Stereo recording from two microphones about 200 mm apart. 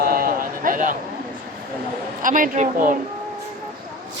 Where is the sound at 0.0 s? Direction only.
45° right (ahead or behind).